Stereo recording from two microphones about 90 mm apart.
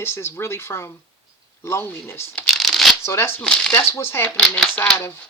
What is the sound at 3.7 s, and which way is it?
Speech, 30° left (ahead or behind).